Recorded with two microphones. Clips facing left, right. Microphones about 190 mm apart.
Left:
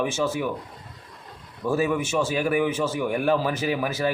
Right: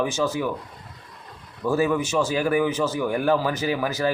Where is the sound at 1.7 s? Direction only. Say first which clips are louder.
Right 2 dB; 10° left (ahead or behind).